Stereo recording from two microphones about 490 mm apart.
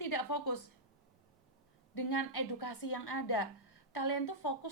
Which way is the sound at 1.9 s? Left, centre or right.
Left.